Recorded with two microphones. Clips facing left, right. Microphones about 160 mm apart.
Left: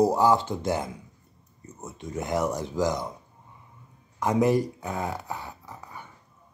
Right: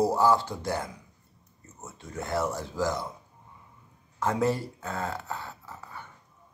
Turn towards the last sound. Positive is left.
turn(degrees=15)  # may be behind; listen again after turning